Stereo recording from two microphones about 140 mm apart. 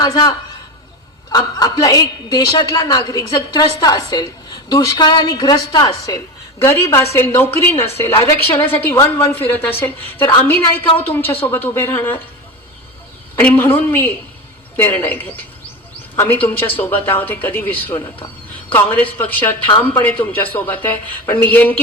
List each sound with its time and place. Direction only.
0.0 s a man's voice: 25° left (ahead or behind)
1.3 s a woman's voice: 30° left (ahead or behind)
13.3 s speech: 15° left (ahead or behind)